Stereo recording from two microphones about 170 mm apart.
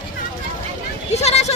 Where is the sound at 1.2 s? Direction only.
40° left (ahead or behind).